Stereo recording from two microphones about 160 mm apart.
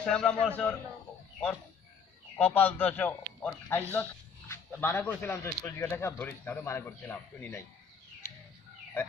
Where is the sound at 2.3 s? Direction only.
10° left (ahead or behind).